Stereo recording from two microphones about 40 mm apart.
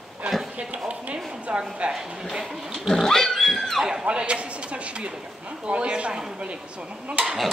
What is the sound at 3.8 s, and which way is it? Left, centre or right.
A woman's voice, centre.